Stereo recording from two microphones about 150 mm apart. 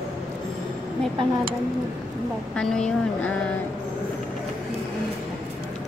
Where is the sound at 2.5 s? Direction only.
5° left (ahead or behind).